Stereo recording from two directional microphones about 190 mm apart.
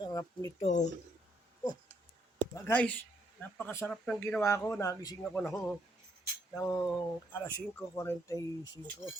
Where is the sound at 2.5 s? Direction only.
10° left (ahead or behind).